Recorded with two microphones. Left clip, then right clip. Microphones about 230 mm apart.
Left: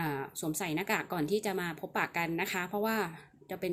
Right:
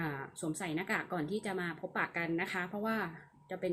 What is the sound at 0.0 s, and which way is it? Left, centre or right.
Speech, left.